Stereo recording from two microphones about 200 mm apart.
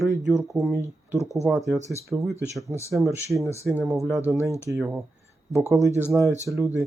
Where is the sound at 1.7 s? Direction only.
35° right (ahead or behind).